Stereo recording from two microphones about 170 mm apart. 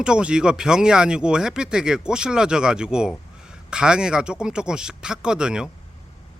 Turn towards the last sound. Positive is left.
turn(degrees=-5)  # may be behind; listen again after turning